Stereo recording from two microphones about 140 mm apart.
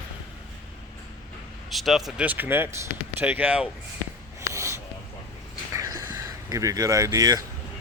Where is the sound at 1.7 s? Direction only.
Centre (ahead or behind).